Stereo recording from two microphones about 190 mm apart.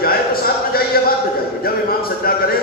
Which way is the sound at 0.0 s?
50° left (ahead or behind).